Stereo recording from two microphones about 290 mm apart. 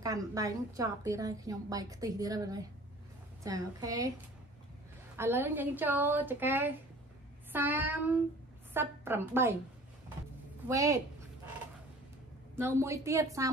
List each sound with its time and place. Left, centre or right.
0.0 s a woman's voice: centre
5.1 s a woman's voice: centre
10.7 s a woman's voice: centre
12.5 s a woman's voice: centre